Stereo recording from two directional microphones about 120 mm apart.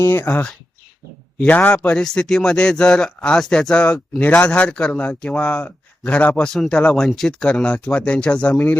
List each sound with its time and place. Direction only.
0.0 s speech: 15° left (ahead or behind)